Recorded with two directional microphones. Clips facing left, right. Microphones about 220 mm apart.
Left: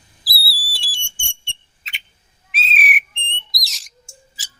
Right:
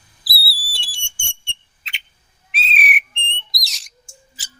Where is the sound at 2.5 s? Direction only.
Centre (ahead or behind).